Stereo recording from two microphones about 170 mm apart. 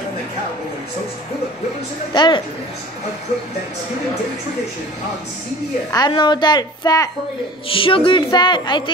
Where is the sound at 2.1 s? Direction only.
25° left (ahead or behind).